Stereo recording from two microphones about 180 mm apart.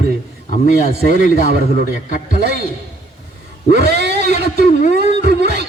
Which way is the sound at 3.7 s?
65° right (ahead or behind).